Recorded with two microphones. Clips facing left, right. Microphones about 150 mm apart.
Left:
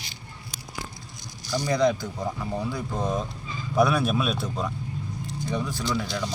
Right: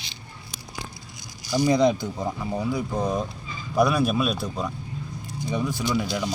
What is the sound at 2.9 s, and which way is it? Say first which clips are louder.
Speech: right 2 dB; centre (ahead or behind).